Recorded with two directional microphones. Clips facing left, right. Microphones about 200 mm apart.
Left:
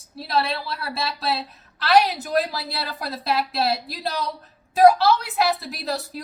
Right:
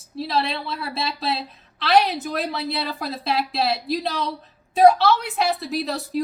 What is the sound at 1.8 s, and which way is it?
A woman's voice, centre (ahead or behind).